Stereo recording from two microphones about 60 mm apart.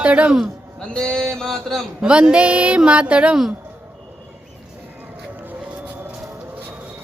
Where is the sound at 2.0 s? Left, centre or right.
Centre.